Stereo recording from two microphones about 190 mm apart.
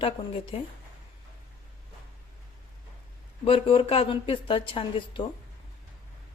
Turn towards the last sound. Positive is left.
turn(degrees=25)  # may be behind; listen again after turning